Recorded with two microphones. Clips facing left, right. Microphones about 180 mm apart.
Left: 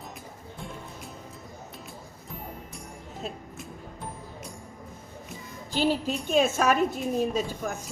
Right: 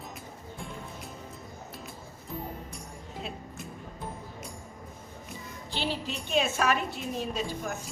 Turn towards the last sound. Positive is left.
turn(degrees=45)  # may be behind; listen again after turning